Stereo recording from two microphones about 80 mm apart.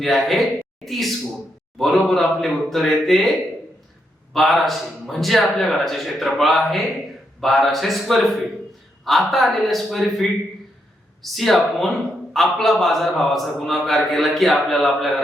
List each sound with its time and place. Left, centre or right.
0.0 s a man's voice: centre
4.4 s a man's voice: centre